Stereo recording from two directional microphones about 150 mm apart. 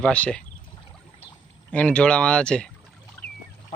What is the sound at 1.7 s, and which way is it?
Speech, 10° left (ahead or behind).